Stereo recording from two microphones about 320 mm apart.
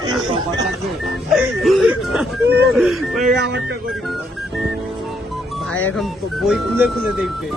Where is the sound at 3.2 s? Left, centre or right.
Right.